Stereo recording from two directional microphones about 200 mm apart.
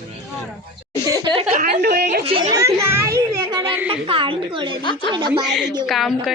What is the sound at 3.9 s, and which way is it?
Speech, 25° right (ahead or behind).